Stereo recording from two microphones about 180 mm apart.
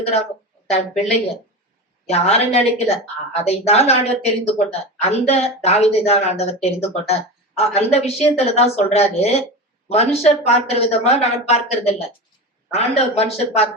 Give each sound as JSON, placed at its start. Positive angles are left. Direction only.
{"t": 0.0, "sound": "a woman's voice", "side_deg": 35}